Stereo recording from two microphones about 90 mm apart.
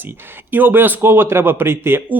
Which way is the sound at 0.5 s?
20° right (ahead or behind).